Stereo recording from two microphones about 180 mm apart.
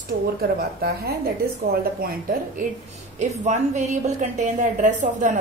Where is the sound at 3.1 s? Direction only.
40° right (ahead or behind).